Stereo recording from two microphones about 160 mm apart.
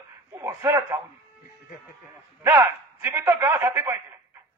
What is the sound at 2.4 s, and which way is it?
A man's voice, 15° right (ahead or behind).